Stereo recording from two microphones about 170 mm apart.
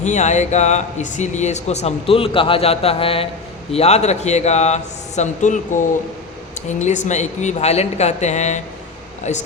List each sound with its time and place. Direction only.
0.0 s speech: 45° left (ahead or behind)